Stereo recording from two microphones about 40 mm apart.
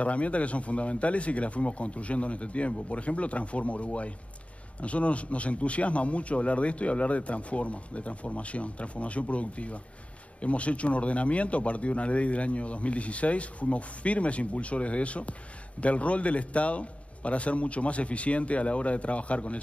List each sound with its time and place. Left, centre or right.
0.0 s a man's voice: left